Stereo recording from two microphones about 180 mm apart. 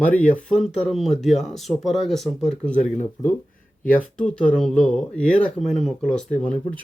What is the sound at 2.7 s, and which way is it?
Speech, 45° left (ahead or behind).